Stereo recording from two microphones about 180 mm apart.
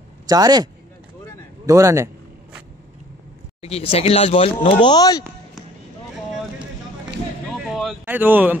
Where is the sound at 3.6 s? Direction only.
35° left (ahead or behind).